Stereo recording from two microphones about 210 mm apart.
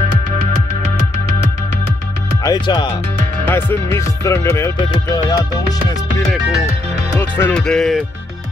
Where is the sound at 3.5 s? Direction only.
10° left (ahead or behind).